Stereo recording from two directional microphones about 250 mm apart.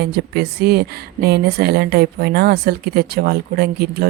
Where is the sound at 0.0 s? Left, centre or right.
Right.